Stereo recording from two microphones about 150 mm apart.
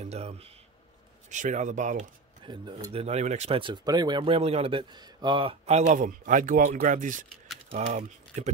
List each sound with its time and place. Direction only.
0.0 s a man's voice: 45° right (ahead or behind)
2.4 s speech: 30° right (ahead or behind); by 7.2 s 60° right (ahead or behind)
7.7 s speech: 45° right (ahead or behind)